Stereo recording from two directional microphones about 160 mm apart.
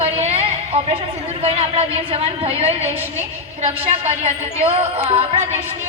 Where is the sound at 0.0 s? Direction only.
40° right (ahead or behind).